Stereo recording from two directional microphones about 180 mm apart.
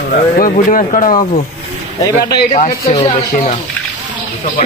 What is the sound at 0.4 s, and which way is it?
Speech, 50° left (ahead or behind).